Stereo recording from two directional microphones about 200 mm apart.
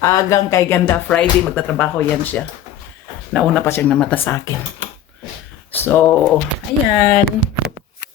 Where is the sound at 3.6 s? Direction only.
10° left (ahead or behind).